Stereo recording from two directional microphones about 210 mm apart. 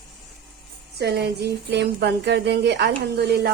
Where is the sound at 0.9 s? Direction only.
50° right (ahead or behind).